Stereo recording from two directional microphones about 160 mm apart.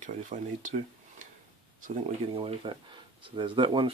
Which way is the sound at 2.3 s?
35° right (ahead or behind).